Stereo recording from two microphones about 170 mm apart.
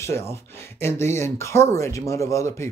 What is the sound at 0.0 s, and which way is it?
Speech, 15° left (ahead or behind).